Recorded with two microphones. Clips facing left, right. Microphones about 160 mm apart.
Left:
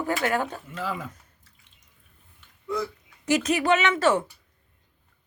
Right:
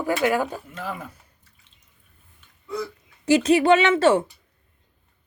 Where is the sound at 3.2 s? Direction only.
30° right (ahead or behind).